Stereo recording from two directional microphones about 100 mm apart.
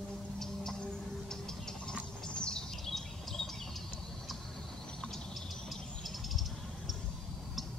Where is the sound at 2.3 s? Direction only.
10° left (ahead or behind).